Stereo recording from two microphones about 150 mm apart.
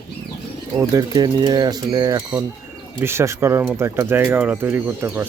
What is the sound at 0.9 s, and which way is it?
Speech, 25° right (ahead or behind).